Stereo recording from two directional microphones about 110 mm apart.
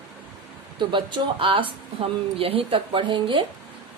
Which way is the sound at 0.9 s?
45° right (ahead or behind).